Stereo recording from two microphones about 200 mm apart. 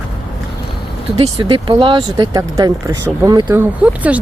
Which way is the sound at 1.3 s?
25° right (ahead or behind).